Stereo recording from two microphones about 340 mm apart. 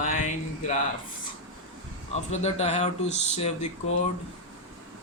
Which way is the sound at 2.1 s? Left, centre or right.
Centre.